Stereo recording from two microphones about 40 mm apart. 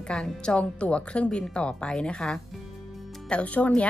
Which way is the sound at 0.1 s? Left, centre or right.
Left.